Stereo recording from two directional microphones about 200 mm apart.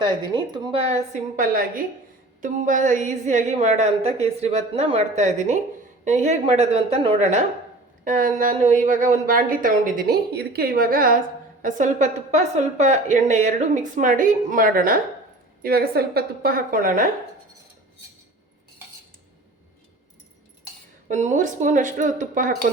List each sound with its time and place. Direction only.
0.0 s speech: 25° right (ahead or behind)
1.1 s a woman's voice: 45° right (ahead or behind)
8.0 s a woman's voice: 45° right (ahead or behind)
21.1 s a woman's voice: 40° right (ahead or behind)